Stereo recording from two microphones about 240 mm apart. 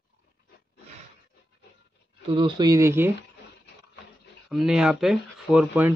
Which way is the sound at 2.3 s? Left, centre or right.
Centre.